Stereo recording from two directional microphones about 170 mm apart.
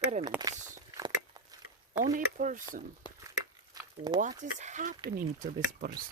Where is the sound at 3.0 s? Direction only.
30° left (ahead or behind).